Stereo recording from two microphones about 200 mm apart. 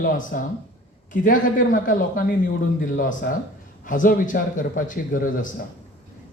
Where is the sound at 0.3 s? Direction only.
45° left (ahead or behind).